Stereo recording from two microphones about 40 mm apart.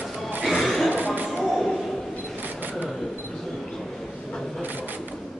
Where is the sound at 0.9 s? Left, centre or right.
Right.